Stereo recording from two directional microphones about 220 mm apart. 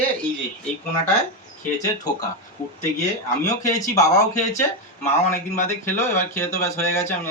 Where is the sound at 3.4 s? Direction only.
15° left (ahead or behind).